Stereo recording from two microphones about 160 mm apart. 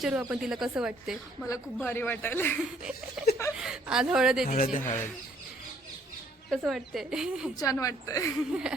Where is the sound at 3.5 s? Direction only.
5° right (ahead or behind).